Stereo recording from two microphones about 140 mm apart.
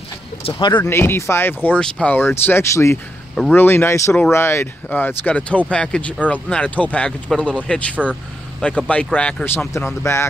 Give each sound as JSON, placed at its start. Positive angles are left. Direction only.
{"t": 0.4, "sound": "speech", "side_deg": 40}
{"t": 0.8, "sound": "speech", "side_deg": 15}